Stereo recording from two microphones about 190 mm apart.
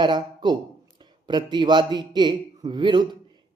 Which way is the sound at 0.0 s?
25° right (ahead or behind).